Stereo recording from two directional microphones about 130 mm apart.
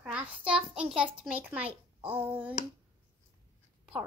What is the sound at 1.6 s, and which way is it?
Speech, 45° right (ahead or behind).